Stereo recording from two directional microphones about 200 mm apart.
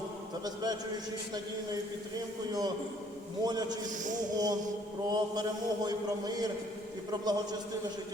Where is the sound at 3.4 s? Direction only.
20° right (ahead or behind).